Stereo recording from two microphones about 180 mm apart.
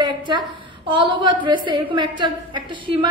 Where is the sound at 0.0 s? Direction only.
25° right (ahead or behind).